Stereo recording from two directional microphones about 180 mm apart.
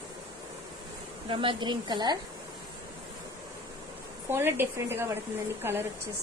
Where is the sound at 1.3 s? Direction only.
25° right (ahead or behind).